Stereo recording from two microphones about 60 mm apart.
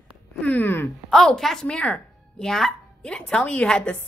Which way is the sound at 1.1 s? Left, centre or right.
Centre.